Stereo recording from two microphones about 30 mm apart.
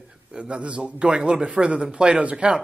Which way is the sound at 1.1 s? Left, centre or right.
Right.